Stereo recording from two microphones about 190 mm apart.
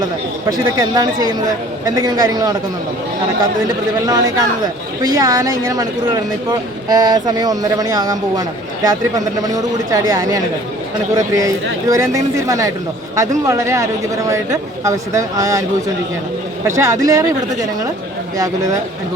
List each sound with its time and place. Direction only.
0.8 s speech: 20° right (ahead or behind)
4.0 s speech: 20° right (ahead or behind)
11.4 s speech: 15° right (ahead or behind)
16.6 s speech: 15° right (ahead or behind)